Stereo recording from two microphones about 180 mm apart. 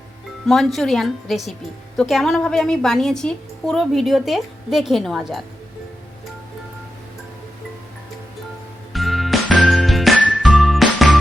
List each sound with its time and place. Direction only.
0.4 s a woman's voice: centre (ahead or behind)
8.9 s music: centre (ahead or behind)